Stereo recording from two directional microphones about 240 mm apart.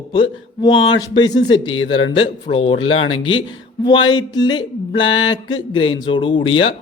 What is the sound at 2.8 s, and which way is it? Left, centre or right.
Speech, left.